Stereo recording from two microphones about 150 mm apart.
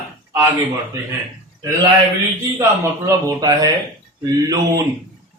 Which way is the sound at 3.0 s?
20° right (ahead or behind).